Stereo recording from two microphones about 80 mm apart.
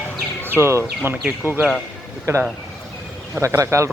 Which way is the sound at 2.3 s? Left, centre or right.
Right.